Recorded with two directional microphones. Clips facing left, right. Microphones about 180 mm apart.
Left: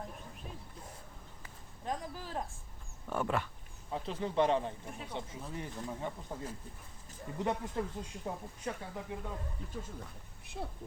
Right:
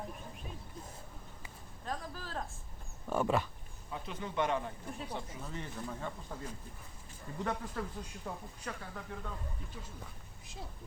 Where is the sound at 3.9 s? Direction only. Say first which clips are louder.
Left 4 dB; 30° left (ahead or behind).